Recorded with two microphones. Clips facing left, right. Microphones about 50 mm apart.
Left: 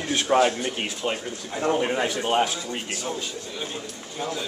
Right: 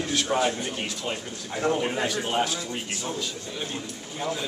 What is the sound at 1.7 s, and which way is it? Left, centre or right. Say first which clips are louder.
Speech: left 2 dB; centre.